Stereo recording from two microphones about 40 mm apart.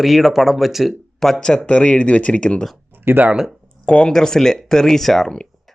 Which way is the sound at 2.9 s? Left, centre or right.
Right.